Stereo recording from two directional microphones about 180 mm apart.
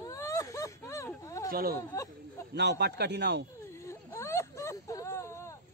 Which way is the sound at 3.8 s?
15° left (ahead or behind).